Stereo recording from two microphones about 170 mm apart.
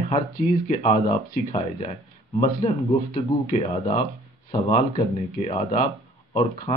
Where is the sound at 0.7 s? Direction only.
45° left (ahead or behind).